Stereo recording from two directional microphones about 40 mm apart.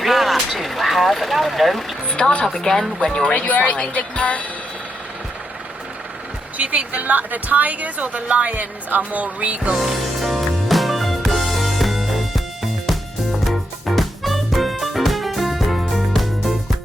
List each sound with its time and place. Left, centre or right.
0.0 s vehicle: centre
2.1 s speech: left
3.3 s speech: left
6.6 s speech: right
9.7 s music: centre
13.4 s music: centre